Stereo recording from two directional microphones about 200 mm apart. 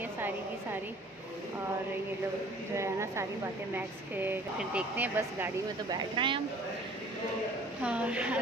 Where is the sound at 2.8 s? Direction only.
15° right (ahead or behind).